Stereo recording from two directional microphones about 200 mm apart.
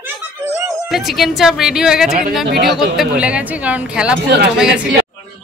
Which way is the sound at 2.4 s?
55° right (ahead or behind).